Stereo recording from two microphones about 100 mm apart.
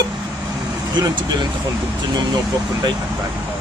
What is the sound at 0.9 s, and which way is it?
Speech, 45° right (ahead or behind).